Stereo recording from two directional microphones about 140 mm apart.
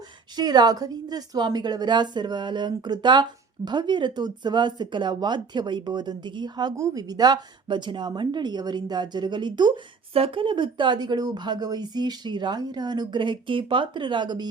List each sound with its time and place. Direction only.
0.3 s a woman's voice: 30° right (ahead or behind)